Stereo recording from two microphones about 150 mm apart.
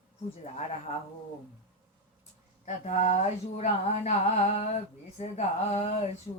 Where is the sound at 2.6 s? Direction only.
55° left (ahead or behind).